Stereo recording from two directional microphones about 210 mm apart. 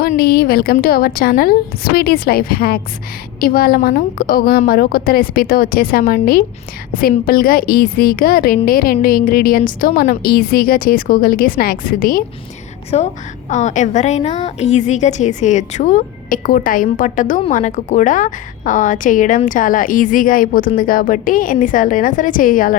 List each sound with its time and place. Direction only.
0.0 s a woman's voice: 45° left (ahead or behind)
12.9 s a woman's voice: 30° left (ahead or behind)